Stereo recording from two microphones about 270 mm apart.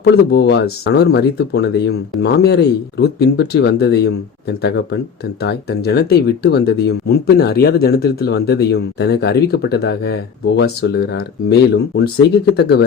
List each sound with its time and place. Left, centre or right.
0.0 s speech: left